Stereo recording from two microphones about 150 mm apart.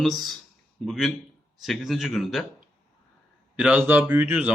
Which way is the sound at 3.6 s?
10° right (ahead or behind).